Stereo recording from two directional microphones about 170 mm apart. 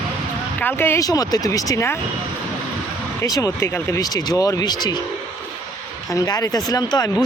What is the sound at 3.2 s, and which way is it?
Speech, 20° left (ahead or behind).